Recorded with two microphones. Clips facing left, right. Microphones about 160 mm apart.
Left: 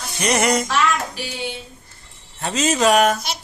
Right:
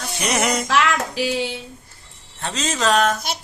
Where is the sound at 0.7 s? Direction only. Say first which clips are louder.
Right 1 dB; 90° right.